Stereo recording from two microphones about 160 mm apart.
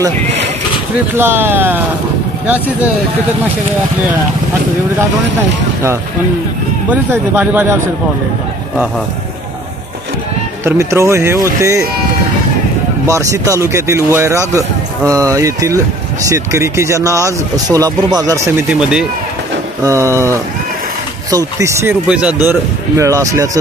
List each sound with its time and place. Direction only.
1.1 s speech: 15° right (ahead or behind)
6.9 s speech: 10° right (ahead or behind)
10.6 s speech: 20° right (ahead or behind)
13.0 s speech: 20° right (ahead or behind)
18.8 s speech: 5° right (ahead or behind)
19.8 s speech: 20° right (ahead or behind)